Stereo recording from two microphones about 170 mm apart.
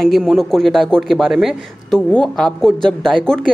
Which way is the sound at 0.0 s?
Centre (ahead or behind).